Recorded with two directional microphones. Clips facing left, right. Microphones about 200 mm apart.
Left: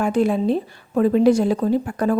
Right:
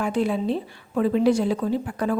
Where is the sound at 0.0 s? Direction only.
45° left (ahead or behind).